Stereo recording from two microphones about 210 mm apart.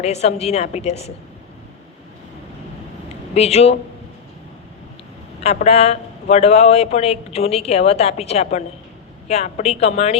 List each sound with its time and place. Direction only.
0.0 s a man's voice: 30° left (ahead or behind)
3.3 s a man's voice: 30° left (ahead or behind)
5.4 s a man's voice: 30° left (ahead or behind)